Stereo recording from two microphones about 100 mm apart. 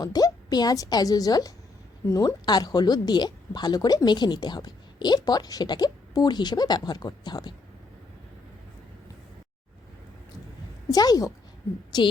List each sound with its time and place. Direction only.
0.0 s a woman's voice: 40° left (ahead or behind)
10.9 s a woman's voice: 40° left (ahead or behind)